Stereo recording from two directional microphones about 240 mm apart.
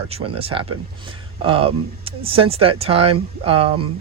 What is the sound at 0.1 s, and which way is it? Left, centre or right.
Speech, right.